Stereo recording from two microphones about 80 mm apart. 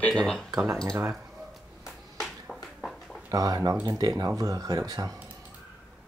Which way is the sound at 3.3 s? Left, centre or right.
Right.